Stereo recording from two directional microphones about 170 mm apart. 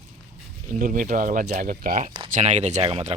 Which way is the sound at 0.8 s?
50° right (ahead or behind).